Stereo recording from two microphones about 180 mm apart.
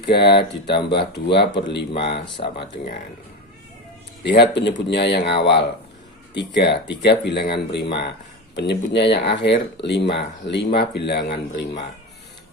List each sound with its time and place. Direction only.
0.2 s speech: 25° left (ahead or behind)
0.7 s speech: 65° left (ahead or behind)
1.9 s speech: 30° left (ahead or behind)
4.2 s speech: 70° left (ahead or behind)